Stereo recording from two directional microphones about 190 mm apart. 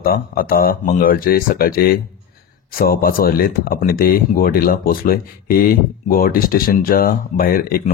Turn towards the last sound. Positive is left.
turn(degrees=50)  # may be behind; listen again after turning